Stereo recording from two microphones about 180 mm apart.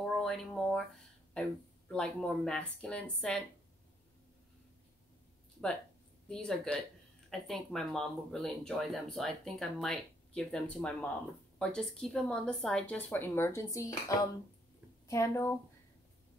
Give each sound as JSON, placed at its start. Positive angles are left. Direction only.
{"t": 0.0, "sound": "a sound", "side_deg": 0}
{"t": 1.9, "sound": "speech", "side_deg": 5}
{"t": 6.2, "sound": "a woman's voice", "side_deg": 5}